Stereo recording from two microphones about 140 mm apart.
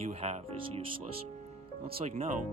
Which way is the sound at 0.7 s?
40° right (ahead or behind).